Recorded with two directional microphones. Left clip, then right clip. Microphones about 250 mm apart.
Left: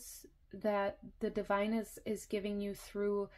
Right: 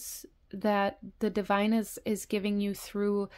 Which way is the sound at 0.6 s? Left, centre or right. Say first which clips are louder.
Right 6 dB; right.